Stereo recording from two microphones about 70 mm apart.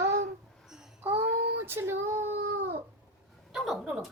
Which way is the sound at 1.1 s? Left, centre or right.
Right.